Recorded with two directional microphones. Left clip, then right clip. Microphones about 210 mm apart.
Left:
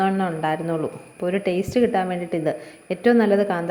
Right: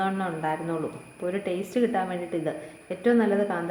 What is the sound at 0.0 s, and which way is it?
A woman's voice, 35° left (ahead or behind).